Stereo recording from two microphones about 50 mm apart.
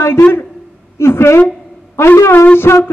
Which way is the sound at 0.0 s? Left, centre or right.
Left.